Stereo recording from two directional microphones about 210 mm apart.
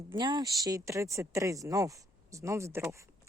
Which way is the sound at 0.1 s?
20° right (ahead or behind).